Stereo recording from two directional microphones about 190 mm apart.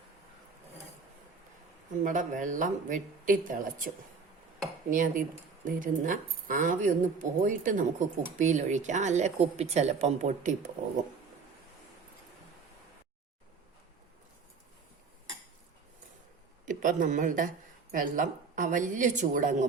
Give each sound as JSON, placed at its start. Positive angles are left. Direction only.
{"t": 2.0, "sound": "speech", "side_deg": -45}
{"t": 4.9, "sound": "speech", "side_deg": -45}
{"t": 16.6, "sound": "speech", "side_deg": -45}